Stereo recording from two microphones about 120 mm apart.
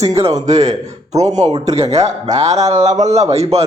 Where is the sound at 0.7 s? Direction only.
30° right (ahead or behind).